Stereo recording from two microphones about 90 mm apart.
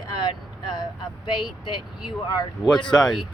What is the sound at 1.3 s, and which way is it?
Speech, 60° left (ahead or behind).